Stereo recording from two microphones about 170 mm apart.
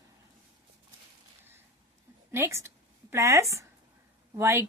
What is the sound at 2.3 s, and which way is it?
A woman's voice, 15° right (ahead or behind).